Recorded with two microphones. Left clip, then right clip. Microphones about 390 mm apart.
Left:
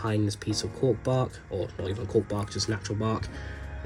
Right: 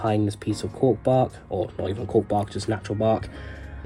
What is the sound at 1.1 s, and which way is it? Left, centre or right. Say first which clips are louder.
Speech: right 7 dB; centre.